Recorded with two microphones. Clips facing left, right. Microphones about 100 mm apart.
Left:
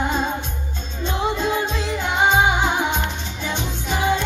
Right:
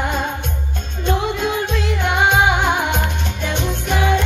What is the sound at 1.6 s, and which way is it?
Music, 60° right (ahead or behind).